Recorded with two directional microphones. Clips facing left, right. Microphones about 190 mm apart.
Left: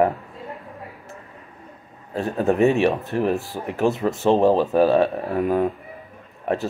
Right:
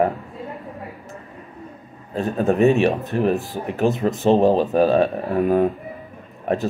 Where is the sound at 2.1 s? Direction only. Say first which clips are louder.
Right 1 dB; 20° right (ahead or behind).